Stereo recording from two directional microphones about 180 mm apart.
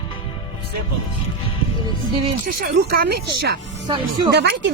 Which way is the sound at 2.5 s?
55° right (ahead or behind).